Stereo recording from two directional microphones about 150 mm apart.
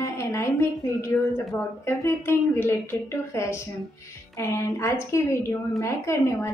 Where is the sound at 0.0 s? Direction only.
20° left (ahead or behind).